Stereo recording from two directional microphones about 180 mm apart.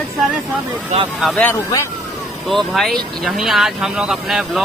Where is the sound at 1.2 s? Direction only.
Centre (ahead or behind).